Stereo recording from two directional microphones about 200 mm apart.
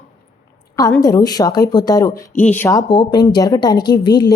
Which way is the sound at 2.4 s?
10° left (ahead or behind).